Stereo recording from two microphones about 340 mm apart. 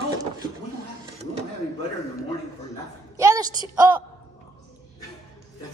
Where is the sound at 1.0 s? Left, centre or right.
Centre.